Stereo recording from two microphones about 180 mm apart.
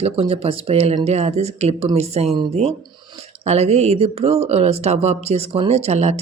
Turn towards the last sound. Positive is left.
turn(degrees=-40)  # may be behind; listen again after turning